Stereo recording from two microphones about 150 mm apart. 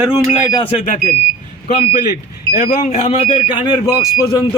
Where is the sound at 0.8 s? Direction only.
50° left (ahead or behind).